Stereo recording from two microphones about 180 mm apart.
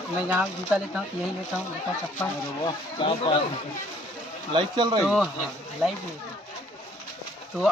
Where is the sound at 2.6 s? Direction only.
30° left (ahead or behind).